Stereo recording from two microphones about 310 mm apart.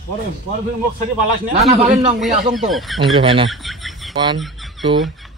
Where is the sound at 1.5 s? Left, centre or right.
Centre.